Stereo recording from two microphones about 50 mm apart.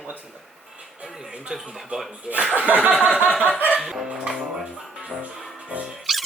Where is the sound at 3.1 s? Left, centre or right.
Right.